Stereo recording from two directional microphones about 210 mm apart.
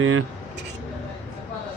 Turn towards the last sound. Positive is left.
turn(degrees=-80)